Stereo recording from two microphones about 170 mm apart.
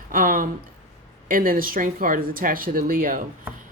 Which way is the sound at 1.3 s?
55° right (ahead or behind).